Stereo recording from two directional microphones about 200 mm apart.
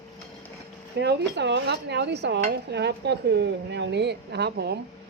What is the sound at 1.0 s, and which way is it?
Dishes, 60° right (ahead or behind).